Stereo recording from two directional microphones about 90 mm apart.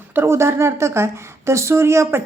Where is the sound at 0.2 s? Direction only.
30° right (ahead or behind).